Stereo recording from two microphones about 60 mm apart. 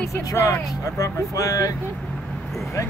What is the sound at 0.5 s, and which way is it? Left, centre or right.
Speech, left.